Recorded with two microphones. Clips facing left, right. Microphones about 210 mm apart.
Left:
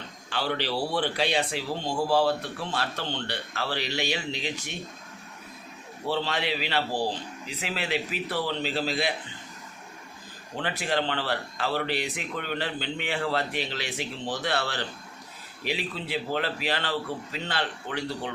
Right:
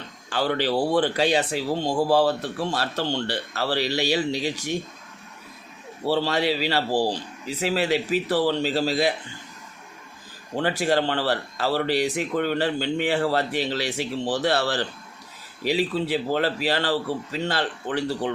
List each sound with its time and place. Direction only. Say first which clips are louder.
0.3 s a man's voice: right 6 dB; 45° right (ahead or behind)
6.1 s a man's voice: right 6 dB; 40° right (ahead or behind)
6.9 s speech: right 8 dB; 85° right
7.4 s a man's voice: right 10 dB; 40° right (ahead or behind)
10.6 s a man's voice: right 6 dB; 40° right (ahead or behind)
16.3 s a man's voice: right 4 dB; 40° right (ahead or behind)